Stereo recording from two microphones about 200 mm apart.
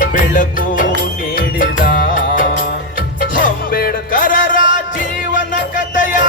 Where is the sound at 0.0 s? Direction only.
45° left (ahead or behind).